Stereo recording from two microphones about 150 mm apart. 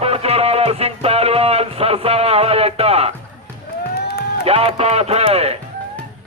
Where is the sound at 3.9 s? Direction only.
90° left.